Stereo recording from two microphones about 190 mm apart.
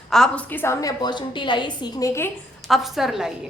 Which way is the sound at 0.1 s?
5° left (ahead or behind).